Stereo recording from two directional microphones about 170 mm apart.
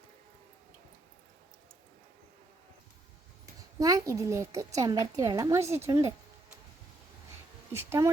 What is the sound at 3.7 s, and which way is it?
A woman's voice, 20° right (ahead or behind).